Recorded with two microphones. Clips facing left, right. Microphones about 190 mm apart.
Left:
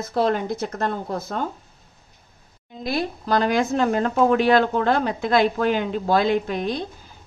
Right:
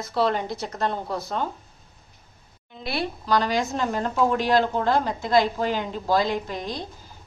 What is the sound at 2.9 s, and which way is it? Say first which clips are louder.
A woman's voice: left 2 dB; 45° left (ahead or behind).